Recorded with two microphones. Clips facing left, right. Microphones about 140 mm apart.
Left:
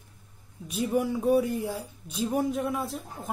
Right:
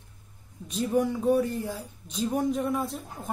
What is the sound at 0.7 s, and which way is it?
Speech, 10° left (ahead or behind).